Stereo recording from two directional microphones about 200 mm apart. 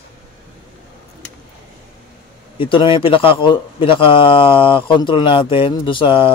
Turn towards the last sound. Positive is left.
turn(degrees=25)  # may be behind; listen again after turning